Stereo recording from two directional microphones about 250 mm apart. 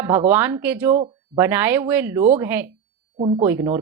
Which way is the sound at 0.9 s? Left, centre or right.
Right.